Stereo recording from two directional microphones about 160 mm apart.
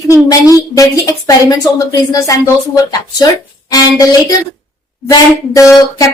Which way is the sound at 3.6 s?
25° left (ahead or behind).